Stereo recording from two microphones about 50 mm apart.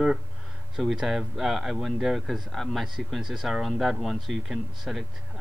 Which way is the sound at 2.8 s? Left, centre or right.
Centre.